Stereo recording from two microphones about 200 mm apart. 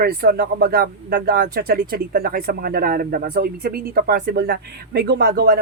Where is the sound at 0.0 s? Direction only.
50° right (ahead or behind).